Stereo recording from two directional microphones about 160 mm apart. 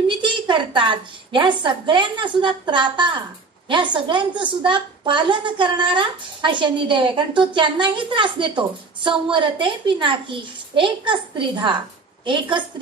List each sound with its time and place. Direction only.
0.2 s a woman's voice: 30° right (ahead or behind)